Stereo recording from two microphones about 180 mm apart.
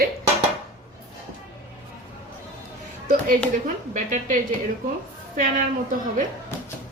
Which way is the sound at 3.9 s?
45° right (ahead or behind).